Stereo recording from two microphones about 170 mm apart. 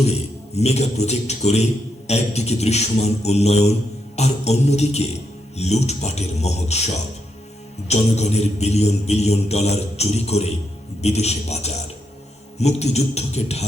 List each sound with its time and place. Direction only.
0.0 s a man's voice: 40° left (ahead or behind)
2.0 s music: 40° left (ahead or behind)